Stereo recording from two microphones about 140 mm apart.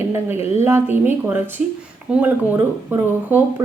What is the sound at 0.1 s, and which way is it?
A woman's voice, 20° right (ahead or behind).